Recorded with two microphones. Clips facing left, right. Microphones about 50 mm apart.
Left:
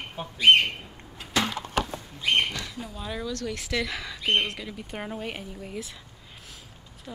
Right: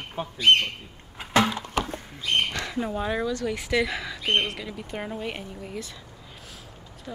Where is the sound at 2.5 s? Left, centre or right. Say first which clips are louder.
Right 7 dB; right.